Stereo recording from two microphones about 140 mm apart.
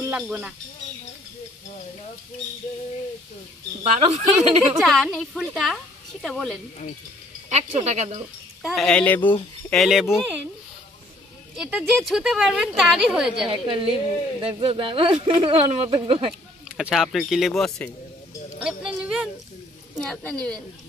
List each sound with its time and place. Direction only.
0.1 s speech: 5° right (ahead or behind)
4.0 s speech: 45° right (ahead or behind)
4.7 s a woman's voice: 5° left (ahead or behind)
7.4 s speech: 50° right (ahead or behind)
8.6 s speech: centre (ahead or behind)
9.7 s a woman's voice: centre (ahead or behind)
11.5 s a woman's voice: centre (ahead or behind)
13.5 s speech: 40° right (ahead or behind)
16.7 s a woman's voice: centre (ahead or behind)
18.6 s a sound: 5° right (ahead or behind)
20.0 s speech: 10° left (ahead or behind)